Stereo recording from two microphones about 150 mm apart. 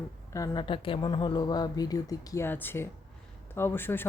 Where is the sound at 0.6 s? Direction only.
35° left (ahead or behind).